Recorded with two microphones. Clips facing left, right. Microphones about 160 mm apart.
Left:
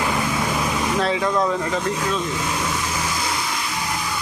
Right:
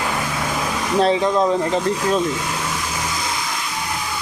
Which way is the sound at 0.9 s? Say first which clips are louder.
Right 6 dB; 30° right (ahead or behind).